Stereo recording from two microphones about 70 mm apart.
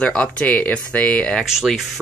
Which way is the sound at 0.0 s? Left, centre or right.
Centre.